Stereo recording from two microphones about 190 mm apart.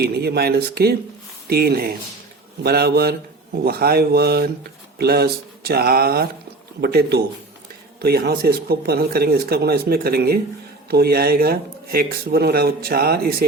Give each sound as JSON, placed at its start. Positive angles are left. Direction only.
{"t": 0.0, "sound": "speech", "side_deg": -55}